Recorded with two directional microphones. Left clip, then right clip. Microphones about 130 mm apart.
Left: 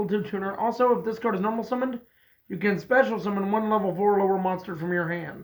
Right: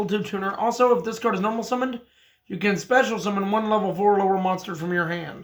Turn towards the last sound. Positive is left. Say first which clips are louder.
# right 2 dB
turn(degrees=-40)  # may be behind; listen again after turning